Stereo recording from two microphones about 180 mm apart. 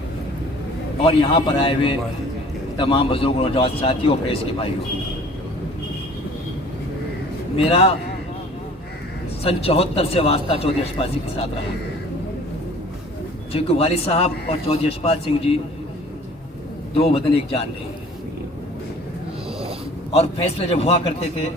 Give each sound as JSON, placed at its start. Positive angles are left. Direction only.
{"t": 1.0, "sound": "a man's voice", "side_deg": 30}
{"t": 7.6, "sound": "a man's voice", "side_deg": 30}
{"t": 9.4, "sound": "a man's voice", "side_deg": 35}
{"t": 13.5, "sound": "a man's voice", "side_deg": 35}
{"t": 16.9, "sound": "a man's voice", "side_deg": 30}
{"t": 20.1, "sound": "a man's voice", "side_deg": 35}